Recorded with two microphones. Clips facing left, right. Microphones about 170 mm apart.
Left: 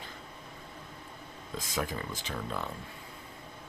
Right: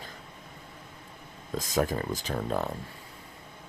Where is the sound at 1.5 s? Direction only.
45° right (ahead or behind).